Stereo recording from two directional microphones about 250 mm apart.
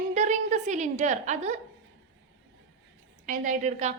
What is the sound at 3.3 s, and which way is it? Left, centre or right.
Speech, right.